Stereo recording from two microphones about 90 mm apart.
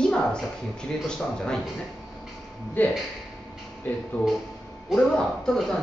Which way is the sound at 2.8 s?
20° left (ahead or behind).